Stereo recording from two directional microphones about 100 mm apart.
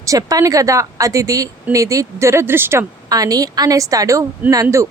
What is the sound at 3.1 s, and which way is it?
Speech, 40° right (ahead or behind).